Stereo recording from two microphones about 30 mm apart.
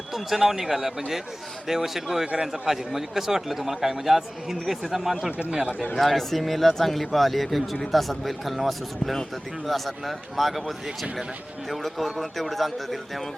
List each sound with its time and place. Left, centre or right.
0.1 s speech: centre
6.0 s speech: centre
10.8 s speech: right
11.7 s speech: centre